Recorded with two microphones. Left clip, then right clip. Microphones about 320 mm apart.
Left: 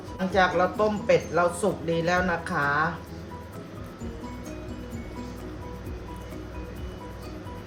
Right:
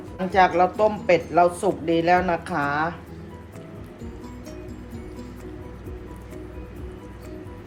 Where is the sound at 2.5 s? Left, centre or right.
Centre.